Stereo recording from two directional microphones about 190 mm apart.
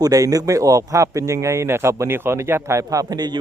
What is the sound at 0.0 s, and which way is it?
Speech, 20° right (ahead or behind).